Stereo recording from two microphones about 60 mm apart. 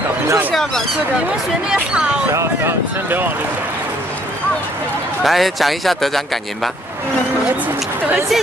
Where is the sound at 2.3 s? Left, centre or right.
Right.